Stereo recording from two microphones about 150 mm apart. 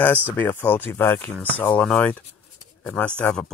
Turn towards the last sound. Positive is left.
turn(degrees=10)  # may be behind; listen again after turning